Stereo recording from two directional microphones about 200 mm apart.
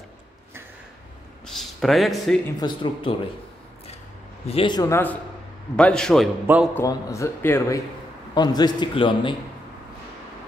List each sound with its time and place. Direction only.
1.4 s a sound: centre (ahead or behind)
2.6 s a man's voice: 25° left (ahead or behind)
4.5 s a man's voice: 25° left (ahead or behind); by 6.2 s 5° left (ahead or behind)
6.4 s a man's voice: 10° right (ahead or behind)
6.7 s a man's voice: 15° left (ahead or behind)